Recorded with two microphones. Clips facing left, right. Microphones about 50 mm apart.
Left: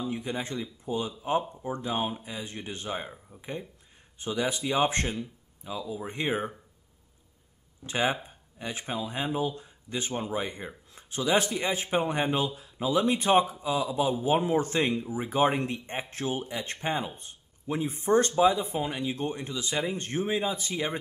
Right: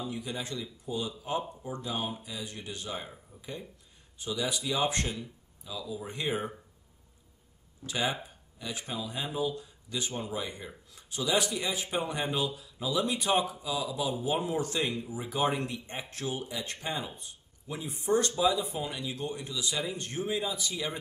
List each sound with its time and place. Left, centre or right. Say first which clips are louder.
0.0 s speech: left 4 dB; left
7.8 s speech: left 4 dB; left